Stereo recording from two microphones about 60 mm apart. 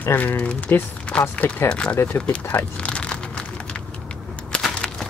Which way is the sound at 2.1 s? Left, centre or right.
Left.